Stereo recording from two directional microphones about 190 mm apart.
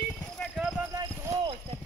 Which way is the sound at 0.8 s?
15° right (ahead or behind).